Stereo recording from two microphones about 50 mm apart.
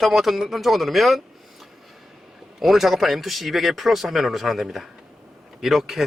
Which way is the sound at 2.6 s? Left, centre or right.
Centre.